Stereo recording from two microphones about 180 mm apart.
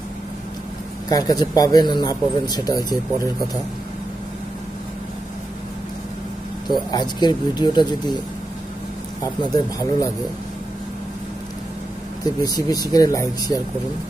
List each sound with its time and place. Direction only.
1.0 s speech: 20° left (ahead or behind)
6.7 s speech: 25° left (ahead or behind)
9.2 s speech: 20° left (ahead or behind)
12.4 s speech: 20° left (ahead or behind)